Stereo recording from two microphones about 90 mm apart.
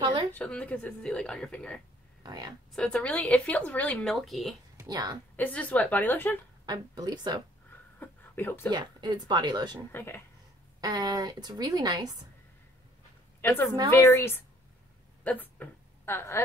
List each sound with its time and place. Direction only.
0.0 s a woman's voice: 65° right (ahead or behind)
0.3 s speech: 15° left (ahead or behind)
2.2 s speech: 50° right (ahead or behind)
2.7 s speech: 10° left (ahead or behind)
4.0 s speech: centre (ahead or behind)
4.8 s a woman's voice: 45° right (ahead or behind)
5.3 s speech: 15° left (ahead or behind)
6.6 s a woman's voice: 50° right (ahead or behind)
8.0 s speech: 20° left (ahead or behind)
8.6 s a woman's voice: 55° right (ahead or behind)
9.9 s a woman's voice: 25° left (ahead or behind)
10.8 s a woman's voice: 50° right (ahead or behind)
13.4 s a woman's voice: 25° left (ahead or behind)